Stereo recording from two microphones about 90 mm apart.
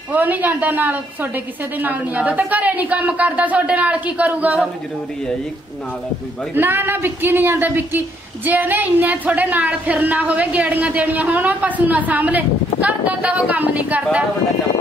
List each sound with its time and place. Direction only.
0.1 s a woman's voice: 20° right (ahead or behind)
6.5 s a woman's voice: 25° right (ahead or behind)